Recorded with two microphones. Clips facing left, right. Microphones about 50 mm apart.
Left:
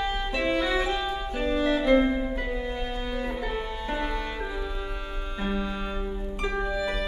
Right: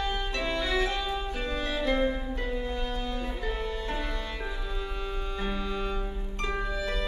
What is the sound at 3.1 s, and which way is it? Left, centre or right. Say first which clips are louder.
Music: left 3 dB; left.